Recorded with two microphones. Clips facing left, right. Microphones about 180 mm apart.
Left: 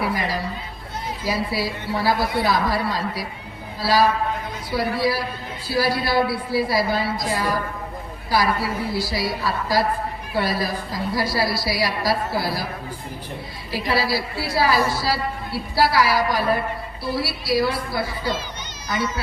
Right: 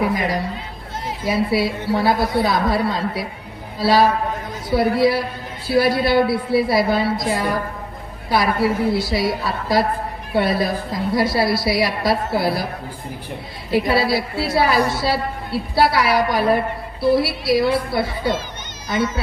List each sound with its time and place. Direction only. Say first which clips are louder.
0.1 s a woman's voice: right 4 dB; 20° right (ahead or behind)
13.7 s a woman's voice: right 5 dB; 25° right (ahead or behind)